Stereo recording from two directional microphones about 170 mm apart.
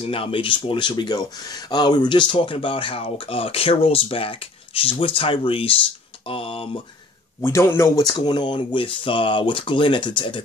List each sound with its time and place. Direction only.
0.0 s speech: 30° left (ahead or behind)
7.4 s speech: 15° left (ahead or behind)